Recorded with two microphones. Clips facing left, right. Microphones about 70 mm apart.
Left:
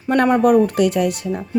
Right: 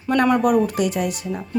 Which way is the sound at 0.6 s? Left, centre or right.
Left.